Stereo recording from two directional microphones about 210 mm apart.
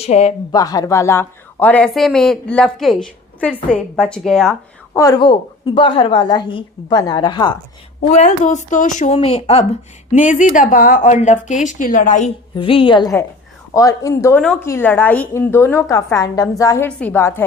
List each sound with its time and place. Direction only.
0.0 s a woman's voice: 30° left (ahead or behind)
0.5 s speech: 15° left (ahead or behind); by 4.5 s centre (ahead or behind)
4.9 s a woman's voice: 20° left (ahead or behind)
8.1 s a woman's voice: 35° left (ahead or behind)
12.5 s a woman's voice: 25° left (ahead or behind)